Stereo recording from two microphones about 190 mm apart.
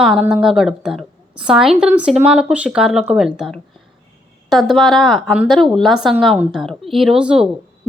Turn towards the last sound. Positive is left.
turn(degrees=-5)  # may be behind; listen again after turning